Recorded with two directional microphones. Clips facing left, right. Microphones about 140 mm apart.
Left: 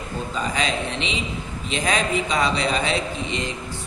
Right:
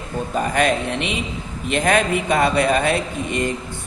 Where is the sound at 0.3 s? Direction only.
55° right (ahead or behind).